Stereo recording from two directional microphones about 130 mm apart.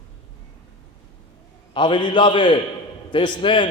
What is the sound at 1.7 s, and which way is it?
A man's voice, 35° left (ahead or behind).